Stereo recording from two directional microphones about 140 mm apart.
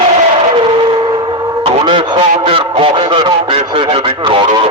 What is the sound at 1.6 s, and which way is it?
A man's voice, 40° right (ahead or behind).